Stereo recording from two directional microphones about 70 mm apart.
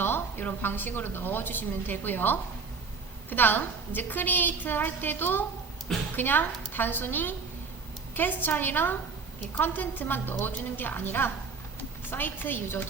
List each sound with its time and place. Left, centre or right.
0.0 s a woman's voice: left